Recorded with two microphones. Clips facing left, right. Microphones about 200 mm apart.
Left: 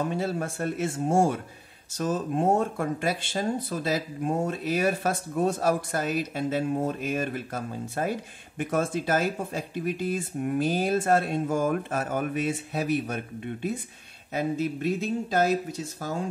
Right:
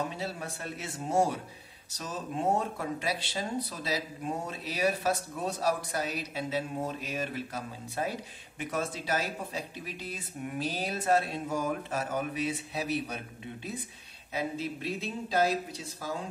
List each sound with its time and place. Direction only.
0.1 s speech: 50° left (ahead or behind)